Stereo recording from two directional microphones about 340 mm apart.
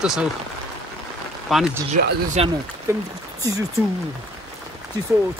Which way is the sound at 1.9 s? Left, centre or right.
Right.